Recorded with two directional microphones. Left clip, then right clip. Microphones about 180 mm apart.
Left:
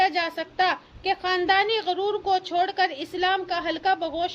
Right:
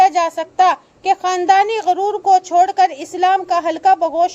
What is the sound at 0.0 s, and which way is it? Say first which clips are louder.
A child's voice: right 10 dB; 25° right (ahead or behind).